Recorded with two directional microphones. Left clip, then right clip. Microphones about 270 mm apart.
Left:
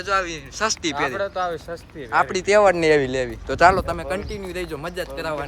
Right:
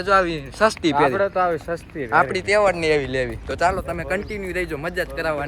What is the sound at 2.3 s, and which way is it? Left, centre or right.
Speech, left.